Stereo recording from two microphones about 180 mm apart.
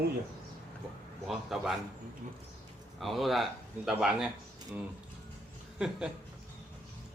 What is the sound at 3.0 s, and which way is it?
Speech, centre (ahead or behind).